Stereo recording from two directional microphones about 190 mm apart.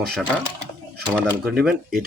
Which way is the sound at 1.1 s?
5° left (ahead or behind).